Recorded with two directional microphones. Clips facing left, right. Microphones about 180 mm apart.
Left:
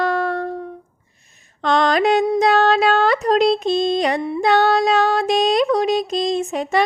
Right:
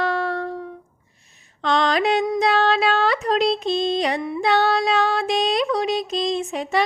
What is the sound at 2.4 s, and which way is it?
Music, 45° left (ahead or behind).